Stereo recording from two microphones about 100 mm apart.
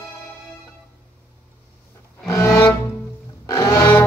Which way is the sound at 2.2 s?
30° left (ahead or behind).